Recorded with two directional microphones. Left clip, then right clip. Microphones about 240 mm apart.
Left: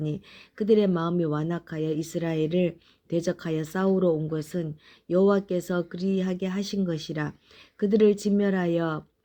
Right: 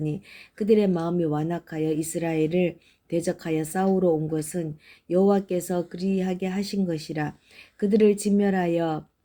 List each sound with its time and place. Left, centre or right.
0.0 s speech: left